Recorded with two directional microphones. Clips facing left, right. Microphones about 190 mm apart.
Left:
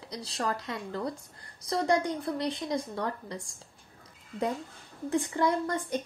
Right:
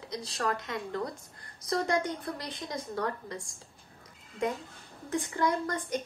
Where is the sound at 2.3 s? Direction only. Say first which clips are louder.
Left 7 dB; 25° left (ahead or behind).